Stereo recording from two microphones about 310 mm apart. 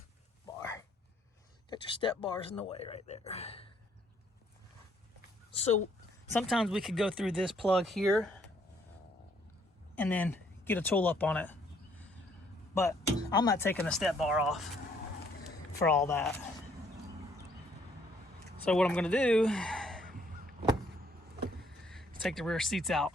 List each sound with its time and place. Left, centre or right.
1.7 s speech: centre
6.3 s speech: centre
9.9 s speech: centre
12.7 s speech: centre
15.8 s speech: centre
18.6 s speech: centre
20.1 s honk: right
22.2 s speech: centre